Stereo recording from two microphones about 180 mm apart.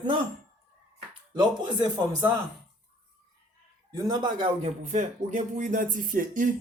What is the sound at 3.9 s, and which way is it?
Speech, 20° right (ahead or behind).